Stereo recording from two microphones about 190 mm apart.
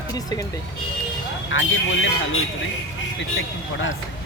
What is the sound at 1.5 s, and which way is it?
Speech, 80° left.